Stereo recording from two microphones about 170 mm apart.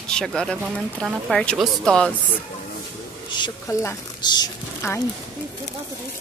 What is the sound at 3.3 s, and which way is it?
Speech, 25° left (ahead or behind).